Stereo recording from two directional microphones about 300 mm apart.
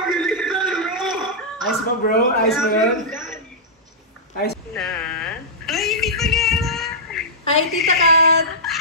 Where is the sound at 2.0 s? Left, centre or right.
Left.